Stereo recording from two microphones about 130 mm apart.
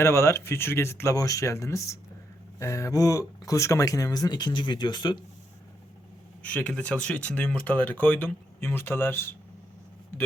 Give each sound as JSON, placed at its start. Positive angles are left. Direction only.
{"t": 0.0, "sound": "speech", "side_deg": 20}
{"t": 6.4, "sound": "speech", "side_deg": 10}